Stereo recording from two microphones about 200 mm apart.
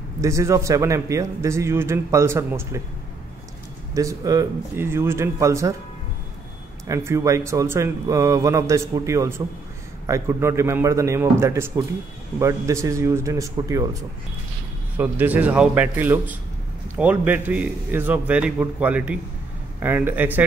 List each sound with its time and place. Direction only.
0.2 s a man's voice: 15° right (ahead or behind)
3.9 s a man's voice: 15° right (ahead or behind)
6.9 s a man's voice: 15° right (ahead or behind)
15.0 s a man's voice: 10° right (ahead or behind)